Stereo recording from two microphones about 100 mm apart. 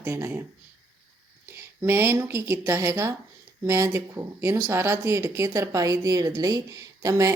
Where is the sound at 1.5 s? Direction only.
25° right (ahead or behind).